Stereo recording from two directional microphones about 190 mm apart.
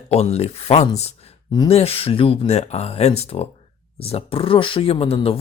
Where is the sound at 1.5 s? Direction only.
20° left (ahead or behind).